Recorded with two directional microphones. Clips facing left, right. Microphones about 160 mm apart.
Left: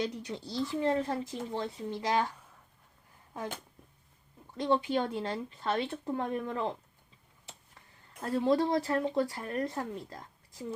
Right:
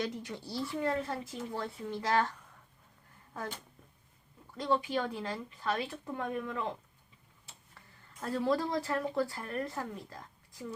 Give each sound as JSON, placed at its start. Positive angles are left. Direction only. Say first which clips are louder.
{"t": 0.0, "sound": "speech", "louder": "left 2 dB", "side_deg": 20}
{"t": 4.5, "sound": "speech", "louder": "left 3 dB", "side_deg": 25}
{"t": 8.2, "sound": "speech", "louder": "left 4 dB", "side_deg": 20}